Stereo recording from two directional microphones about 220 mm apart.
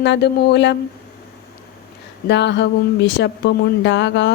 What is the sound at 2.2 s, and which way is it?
Speech, 50° left (ahead or behind).